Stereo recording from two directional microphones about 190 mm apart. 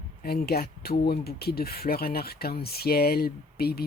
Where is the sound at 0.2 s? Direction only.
55° left (ahead or behind).